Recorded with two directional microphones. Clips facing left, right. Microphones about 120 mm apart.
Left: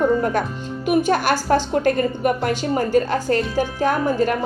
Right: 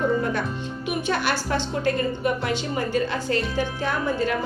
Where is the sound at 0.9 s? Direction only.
45° left (ahead or behind).